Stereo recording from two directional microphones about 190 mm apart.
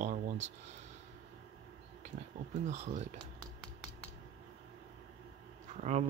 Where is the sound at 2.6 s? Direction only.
40° right (ahead or behind).